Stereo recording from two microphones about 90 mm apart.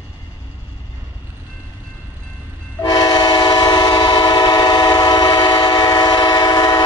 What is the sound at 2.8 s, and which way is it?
Train, 45° left (ahead or behind).